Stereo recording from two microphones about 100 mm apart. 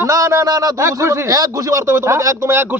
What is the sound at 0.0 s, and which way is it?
A man's voice, 30° right (ahead or behind).